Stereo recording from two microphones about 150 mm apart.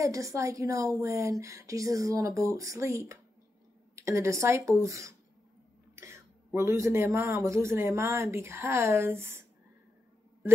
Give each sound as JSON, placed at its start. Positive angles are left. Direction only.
{"t": 0.0, "sound": "speech", "side_deg": -20}